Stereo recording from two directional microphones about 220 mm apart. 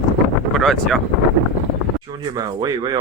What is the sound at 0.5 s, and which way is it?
Speech, centre (ahead or behind).